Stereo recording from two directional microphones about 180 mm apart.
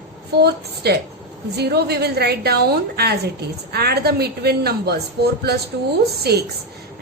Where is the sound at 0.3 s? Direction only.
65° right (ahead or behind).